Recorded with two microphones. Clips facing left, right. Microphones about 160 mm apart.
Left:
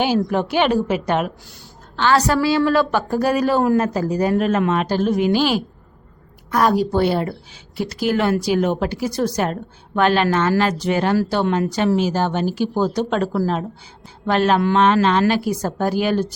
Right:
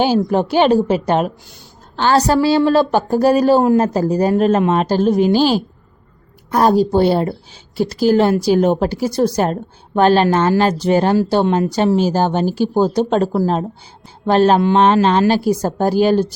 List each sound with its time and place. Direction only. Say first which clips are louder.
0.3 s a woman's voice: right 5 dB; 30° right (ahead or behind)